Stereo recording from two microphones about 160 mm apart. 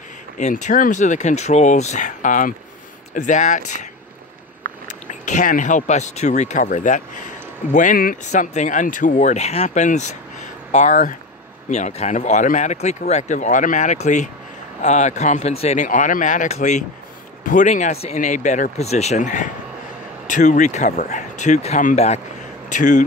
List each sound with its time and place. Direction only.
0.4 s speech: 50° left (ahead or behind)
5.0 s speech: 50° left (ahead or behind)